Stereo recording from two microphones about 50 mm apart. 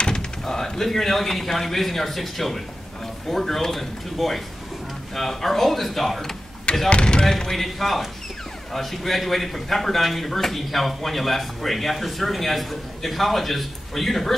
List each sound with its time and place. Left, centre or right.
0.0 s speech: centre
6.9 s speech: centre
7.2 s speech: centre